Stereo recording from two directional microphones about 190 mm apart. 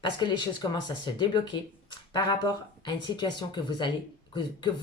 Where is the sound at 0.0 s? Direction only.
25° left (ahead or behind).